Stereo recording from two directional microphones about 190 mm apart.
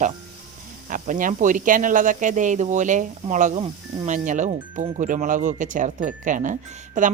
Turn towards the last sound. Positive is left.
turn(degrees=-40)  # may be behind; listen again after turning